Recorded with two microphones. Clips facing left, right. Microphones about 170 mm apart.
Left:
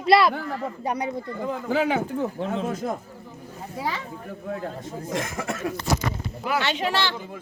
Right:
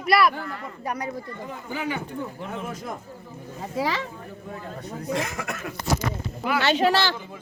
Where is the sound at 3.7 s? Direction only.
90° right.